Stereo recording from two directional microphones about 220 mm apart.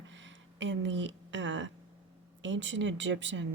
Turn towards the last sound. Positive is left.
turn(degrees=-55)  # may be behind; listen again after turning